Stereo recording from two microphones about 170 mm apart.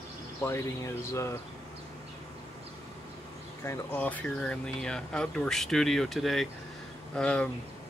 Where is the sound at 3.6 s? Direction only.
10° left (ahead or behind).